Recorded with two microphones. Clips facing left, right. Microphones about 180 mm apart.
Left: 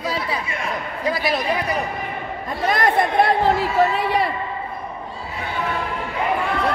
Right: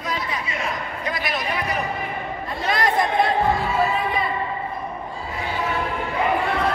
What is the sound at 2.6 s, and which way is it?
Chatter, 55° left (ahead or behind).